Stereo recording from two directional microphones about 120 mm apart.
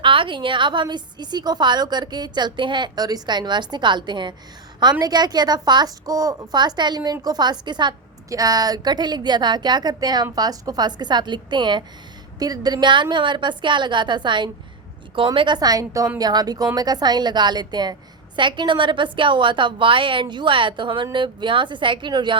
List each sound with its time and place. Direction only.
0.0 s a woman's voice: 45° right (ahead or behind)